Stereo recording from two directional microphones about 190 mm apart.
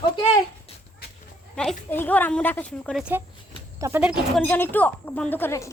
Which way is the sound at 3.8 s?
10° right (ahead or behind).